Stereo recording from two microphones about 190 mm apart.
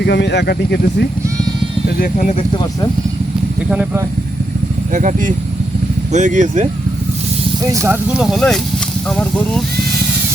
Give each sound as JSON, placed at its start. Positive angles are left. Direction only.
{"t": 0.0, "sound": "speech", "side_deg": 60}
{"t": 2.0, "sound": "speech", "side_deg": 45}
{"t": 3.7, "sound": "speech", "side_deg": -5}
{"t": 4.9, "sound": "speech", "side_deg": -40}
{"t": 7.6, "sound": "speech", "side_deg": -15}